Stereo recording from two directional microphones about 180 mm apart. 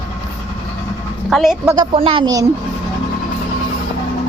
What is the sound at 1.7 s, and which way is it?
Speech, 30° right (ahead or behind).